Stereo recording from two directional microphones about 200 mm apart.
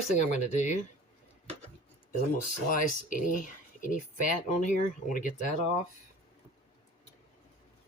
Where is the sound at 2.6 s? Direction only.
40° left (ahead or behind).